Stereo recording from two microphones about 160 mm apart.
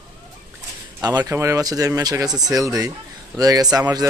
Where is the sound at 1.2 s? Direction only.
20° right (ahead or behind).